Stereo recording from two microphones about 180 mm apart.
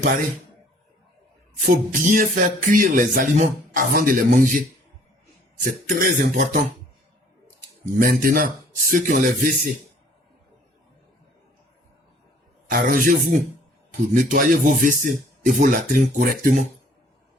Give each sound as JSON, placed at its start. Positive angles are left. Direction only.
{"t": 1.5, "sound": "music", "side_deg": -50}
{"t": 5.6, "sound": "music", "side_deg": -50}
{"t": 7.9, "sound": "music", "side_deg": -50}
{"t": 12.7, "sound": "music", "side_deg": -50}